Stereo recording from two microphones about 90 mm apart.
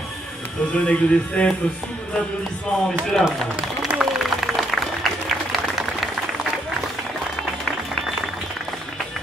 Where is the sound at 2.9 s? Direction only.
5° left (ahead or behind).